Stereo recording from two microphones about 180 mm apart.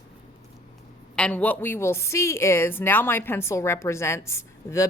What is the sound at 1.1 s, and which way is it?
A woman's voice, 5° left (ahead or behind).